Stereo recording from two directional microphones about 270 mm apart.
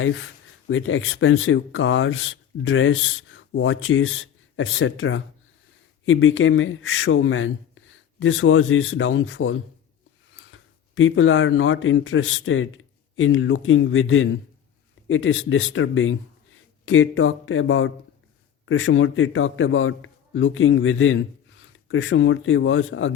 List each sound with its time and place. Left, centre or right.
0.7 s speech: left